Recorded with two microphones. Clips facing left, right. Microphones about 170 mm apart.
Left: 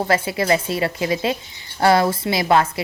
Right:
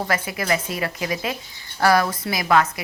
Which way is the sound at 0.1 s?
30° left (ahead or behind).